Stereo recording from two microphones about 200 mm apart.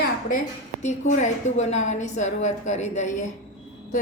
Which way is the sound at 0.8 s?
35° left (ahead or behind).